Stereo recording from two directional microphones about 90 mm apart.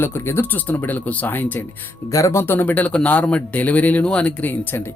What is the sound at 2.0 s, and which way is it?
A man's voice, 35° left (ahead or behind).